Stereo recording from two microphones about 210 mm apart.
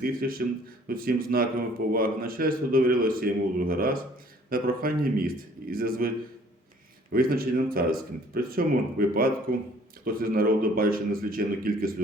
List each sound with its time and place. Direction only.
0.0 s speech: 45° right (ahead or behind)
7.1 s speech: 45° right (ahead or behind)